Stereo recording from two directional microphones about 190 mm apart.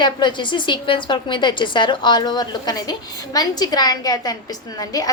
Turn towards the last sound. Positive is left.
turn(degrees=20)  # may be behind; listen again after turning